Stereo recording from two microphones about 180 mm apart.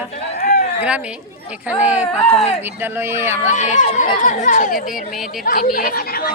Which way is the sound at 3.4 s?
40° left (ahead or behind).